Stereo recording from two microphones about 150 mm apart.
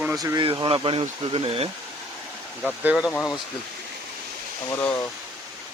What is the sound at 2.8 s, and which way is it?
Speech, 5° right (ahead or behind).